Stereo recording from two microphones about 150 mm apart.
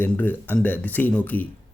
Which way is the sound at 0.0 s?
10° left (ahead or behind).